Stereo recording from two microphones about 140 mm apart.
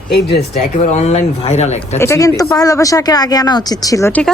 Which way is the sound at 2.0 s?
20° left (ahead or behind).